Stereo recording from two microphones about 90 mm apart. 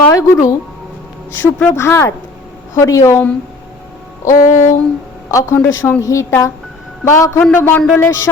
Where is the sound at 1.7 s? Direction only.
30° left (ahead or behind).